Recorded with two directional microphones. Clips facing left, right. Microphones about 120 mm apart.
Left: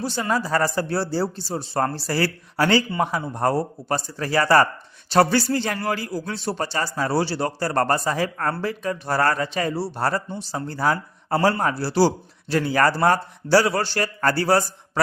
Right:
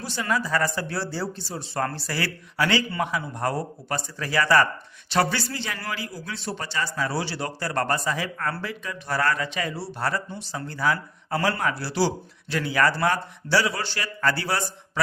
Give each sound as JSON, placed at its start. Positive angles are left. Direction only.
{"t": 0.0, "sound": "a man's voice", "side_deg": 30}